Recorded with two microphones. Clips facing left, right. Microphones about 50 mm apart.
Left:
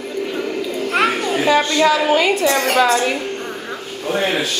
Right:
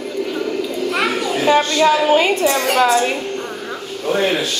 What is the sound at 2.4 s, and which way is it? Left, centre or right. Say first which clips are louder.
Speech: even; left.